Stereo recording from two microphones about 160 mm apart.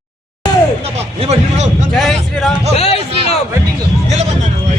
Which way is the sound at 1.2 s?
45° right (ahead or behind).